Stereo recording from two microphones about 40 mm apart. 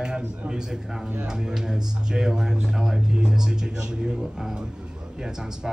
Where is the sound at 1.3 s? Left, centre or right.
Centre.